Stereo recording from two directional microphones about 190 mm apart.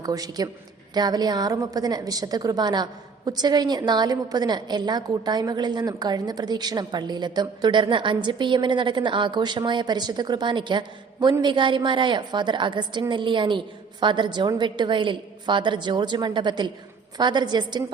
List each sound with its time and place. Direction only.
0.0 s a woman's voice: 20° right (ahead or behind)